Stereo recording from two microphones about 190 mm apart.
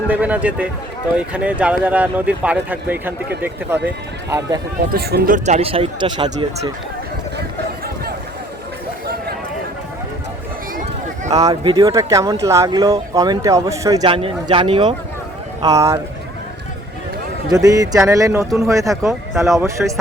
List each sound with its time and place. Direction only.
0.1 s speech: 10° right (ahead or behind)
4.9 s a man's voice: 50° right (ahead or behind); by 6.3 s 25° right (ahead or behind)
11.3 s speech: 20° right (ahead or behind)
17.5 s speech: 20° right (ahead or behind)